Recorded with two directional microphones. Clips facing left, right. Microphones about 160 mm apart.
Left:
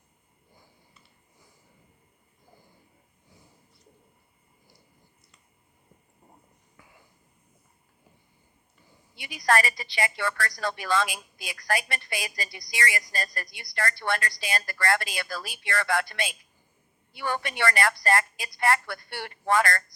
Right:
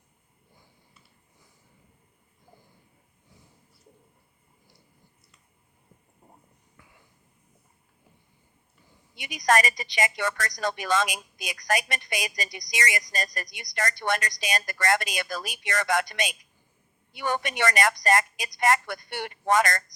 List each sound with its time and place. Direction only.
6.8 s whispering: centre (ahead or behind)
9.1 s a woman's voice: 20° right (ahead or behind)